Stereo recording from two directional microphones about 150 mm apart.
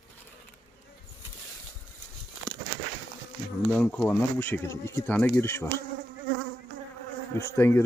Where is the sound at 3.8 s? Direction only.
10° left (ahead or behind).